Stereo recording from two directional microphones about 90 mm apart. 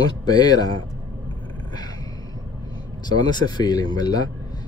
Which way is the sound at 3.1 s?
50° left (ahead or behind).